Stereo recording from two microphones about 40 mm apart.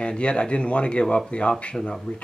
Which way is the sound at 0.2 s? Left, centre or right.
Left.